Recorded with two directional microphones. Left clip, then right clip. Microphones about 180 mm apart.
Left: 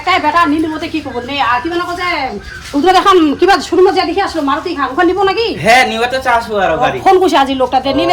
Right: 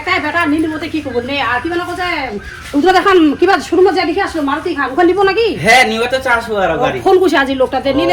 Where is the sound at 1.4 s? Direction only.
35° left (ahead or behind).